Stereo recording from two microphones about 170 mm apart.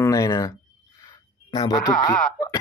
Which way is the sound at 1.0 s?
25° left (ahead or behind).